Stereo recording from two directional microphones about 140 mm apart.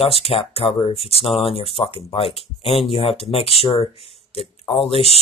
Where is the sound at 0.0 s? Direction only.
45° left (ahead or behind).